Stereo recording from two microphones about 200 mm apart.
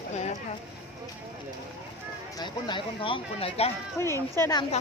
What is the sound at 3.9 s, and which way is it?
Speech, 15° left (ahead or behind).